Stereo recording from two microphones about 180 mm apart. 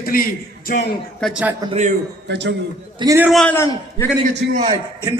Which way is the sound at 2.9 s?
20° right (ahead or behind).